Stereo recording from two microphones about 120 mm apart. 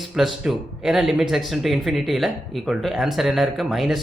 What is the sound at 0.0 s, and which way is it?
Speech, centre (ahead or behind).